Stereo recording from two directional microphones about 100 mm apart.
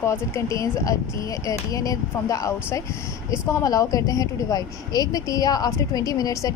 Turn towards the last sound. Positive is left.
turn(degrees=35)  # may be behind; listen again after turning